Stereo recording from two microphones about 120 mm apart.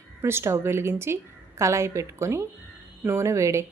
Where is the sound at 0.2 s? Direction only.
20° right (ahead or behind).